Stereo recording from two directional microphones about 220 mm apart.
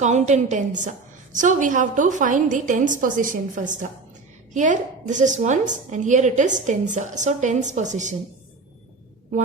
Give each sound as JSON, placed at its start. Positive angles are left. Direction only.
{"t": 0.0, "sound": "a woman's voice", "side_deg": -35}